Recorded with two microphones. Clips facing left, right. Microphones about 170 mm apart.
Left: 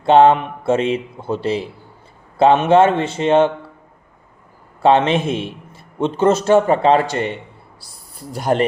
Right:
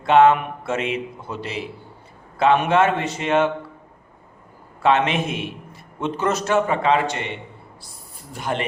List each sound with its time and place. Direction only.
0.0 s a man's voice: 30° left (ahead or behind)
4.8 s a man's voice: 30° left (ahead or behind)